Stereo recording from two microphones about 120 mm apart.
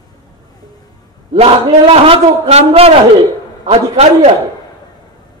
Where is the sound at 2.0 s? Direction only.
60° right (ahead or behind).